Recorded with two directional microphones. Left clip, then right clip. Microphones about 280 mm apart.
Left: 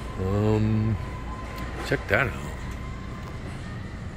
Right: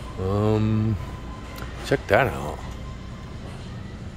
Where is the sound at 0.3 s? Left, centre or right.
Centre.